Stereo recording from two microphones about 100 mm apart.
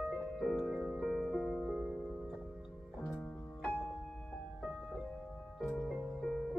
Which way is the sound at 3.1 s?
10° left (ahead or behind).